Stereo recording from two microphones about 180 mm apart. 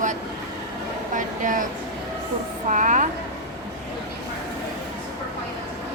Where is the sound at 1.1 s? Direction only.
45° right (ahead or behind).